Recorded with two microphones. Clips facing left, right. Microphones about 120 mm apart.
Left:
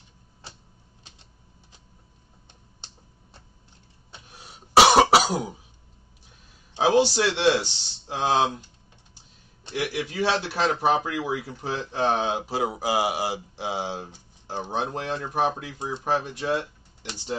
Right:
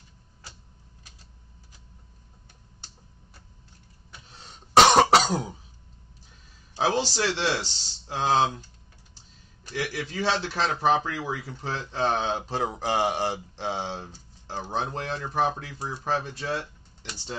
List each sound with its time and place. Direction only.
4.3 s cough: 10° left (ahead or behind)
6.7 s speech: 15° left (ahead or behind)
9.8 s speech: 15° left (ahead or behind)